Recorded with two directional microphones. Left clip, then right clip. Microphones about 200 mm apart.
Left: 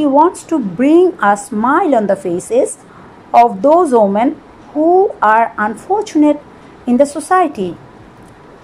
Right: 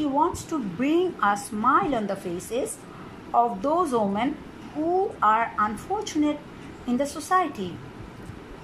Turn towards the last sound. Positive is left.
turn(degrees=35)  # may be behind; listen again after turning